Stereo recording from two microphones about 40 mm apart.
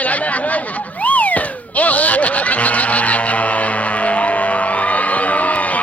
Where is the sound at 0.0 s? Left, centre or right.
Left.